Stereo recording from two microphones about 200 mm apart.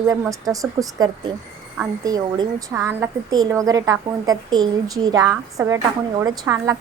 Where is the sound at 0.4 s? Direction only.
15° right (ahead or behind).